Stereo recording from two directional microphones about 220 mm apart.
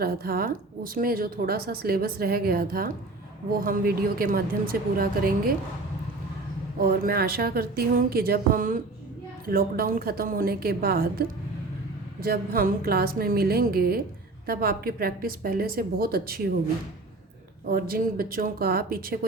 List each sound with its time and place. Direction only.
0.0 s a woman's voice: 45° right (ahead or behind)
6.7 s a woman's voice: 45° right (ahead or behind)
17.7 s a woman's voice: 40° right (ahead or behind)